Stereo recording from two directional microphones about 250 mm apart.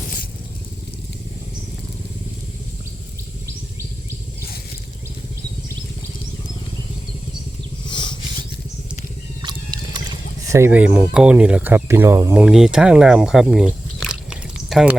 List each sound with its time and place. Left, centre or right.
7.9 s rub: centre
9.4 s a sound: centre
10.5 s speech: centre